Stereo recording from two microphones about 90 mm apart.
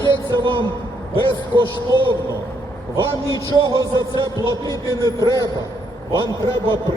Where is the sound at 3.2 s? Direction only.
45° right (ahead or behind).